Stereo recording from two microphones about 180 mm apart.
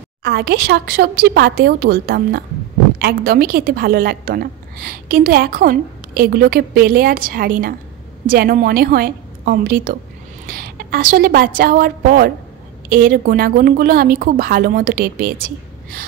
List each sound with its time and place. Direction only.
0.2 s a woman's voice: 60° right (ahead or behind)